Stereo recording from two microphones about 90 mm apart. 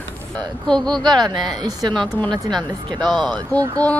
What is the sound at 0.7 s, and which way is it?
Speech, 5° left (ahead or behind).